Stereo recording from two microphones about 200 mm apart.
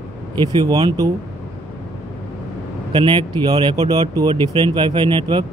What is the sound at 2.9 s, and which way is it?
Speech, 25° right (ahead or behind).